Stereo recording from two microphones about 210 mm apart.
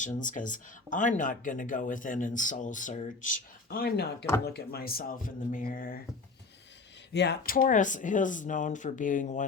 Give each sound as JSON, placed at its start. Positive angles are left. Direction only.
{"t": 0.0, "sound": "speech", "side_deg": 40}
{"t": 7.1, "sound": "speech", "side_deg": 55}